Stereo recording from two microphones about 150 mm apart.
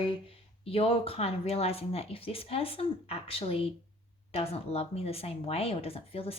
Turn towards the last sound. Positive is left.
turn(degrees=40)  # may be behind; listen again after turning